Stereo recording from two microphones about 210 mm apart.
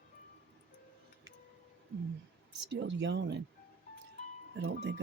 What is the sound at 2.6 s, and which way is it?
Speech, 60° right (ahead or behind).